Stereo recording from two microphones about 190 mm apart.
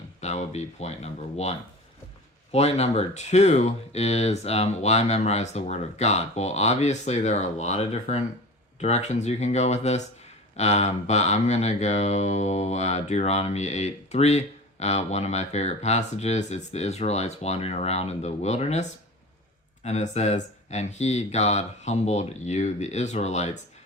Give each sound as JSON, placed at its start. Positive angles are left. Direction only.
{"t": 0.2, "sound": "speech", "side_deg": 35}